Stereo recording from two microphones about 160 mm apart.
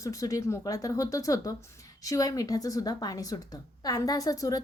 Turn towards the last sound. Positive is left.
turn(degrees=20)  # may be behind; listen again after turning